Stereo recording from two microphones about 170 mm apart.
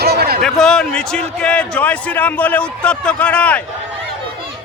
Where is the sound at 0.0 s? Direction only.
70° right (ahead or behind).